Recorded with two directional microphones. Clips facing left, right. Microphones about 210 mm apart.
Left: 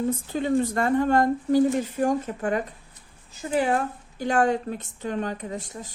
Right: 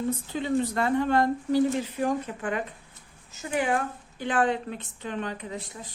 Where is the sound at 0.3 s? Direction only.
45° left (ahead or behind).